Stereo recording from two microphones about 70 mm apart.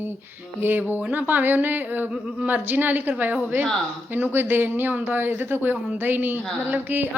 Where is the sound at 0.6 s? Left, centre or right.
Right.